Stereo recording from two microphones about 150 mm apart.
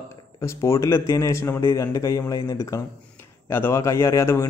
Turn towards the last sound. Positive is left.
turn(degrees=20)  # may be behind; listen again after turning